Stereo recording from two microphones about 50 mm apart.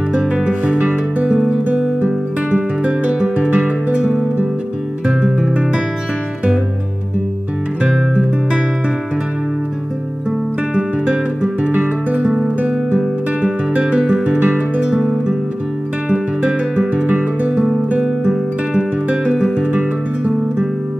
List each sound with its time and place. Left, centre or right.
0.5 s music: centre
2.0 s music: right
10.7 s music: centre
14.9 s music: centre
16.1 s music: right
17.9 s guitar: right
18.3 s music: centre